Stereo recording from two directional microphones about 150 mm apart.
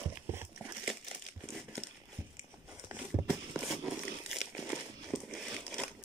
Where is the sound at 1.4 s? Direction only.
Centre (ahead or behind).